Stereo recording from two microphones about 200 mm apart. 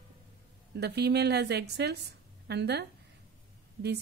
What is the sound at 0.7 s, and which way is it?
A woman's voice, 55° right (ahead or behind).